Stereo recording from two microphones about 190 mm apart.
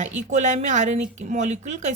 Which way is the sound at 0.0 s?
40° right (ahead or behind).